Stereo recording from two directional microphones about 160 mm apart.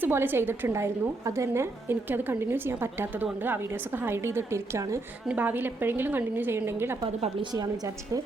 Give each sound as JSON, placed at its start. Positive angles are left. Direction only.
{"t": 0.0, "sound": "a woman's voice", "side_deg": -15}